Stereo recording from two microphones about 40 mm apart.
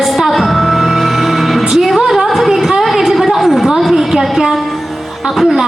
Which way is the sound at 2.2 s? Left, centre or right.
Centre.